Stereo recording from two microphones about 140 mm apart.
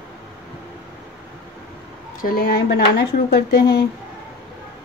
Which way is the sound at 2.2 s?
90° left.